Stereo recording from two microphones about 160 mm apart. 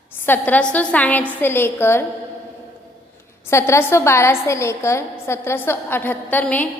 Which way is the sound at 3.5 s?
15° left (ahead or behind).